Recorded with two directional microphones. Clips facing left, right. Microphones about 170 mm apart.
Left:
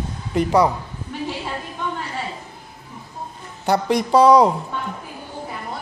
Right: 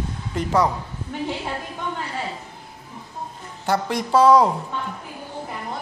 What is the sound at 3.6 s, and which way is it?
Speech, 15° left (ahead or behind).